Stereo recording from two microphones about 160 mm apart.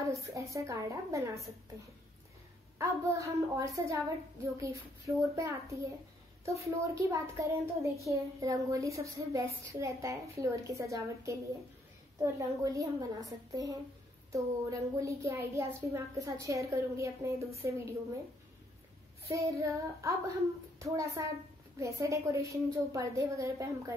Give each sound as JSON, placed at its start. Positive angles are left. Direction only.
{"t": 0.0, "sound": "a child's voice", "side_deg": -20}
{"t": 2.8, "sound": "a child's voice", "side_deg": -20}
{"t": 5.3, "sound": "a child's voice", "side_deg": -20}
{"t": 19.2, "sound": "a child's voice", "side_deg": -20}